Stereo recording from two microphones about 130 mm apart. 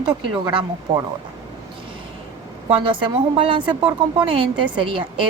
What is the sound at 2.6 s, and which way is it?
A woman's voice, 45° right (ahead or behind).